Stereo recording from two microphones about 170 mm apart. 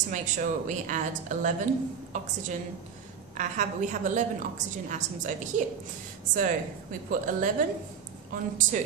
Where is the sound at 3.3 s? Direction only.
45° right (ahead or behind).